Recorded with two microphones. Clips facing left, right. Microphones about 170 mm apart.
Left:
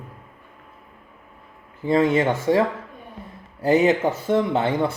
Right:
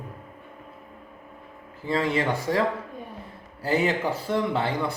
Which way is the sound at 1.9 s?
20° left (ahead or behind).